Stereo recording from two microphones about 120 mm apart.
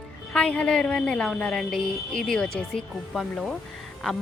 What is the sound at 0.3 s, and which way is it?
A woman's voice, 10° left (ahead or behind).